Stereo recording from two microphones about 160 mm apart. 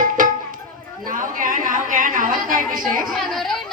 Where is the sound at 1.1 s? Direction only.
55° right (ahead or behind).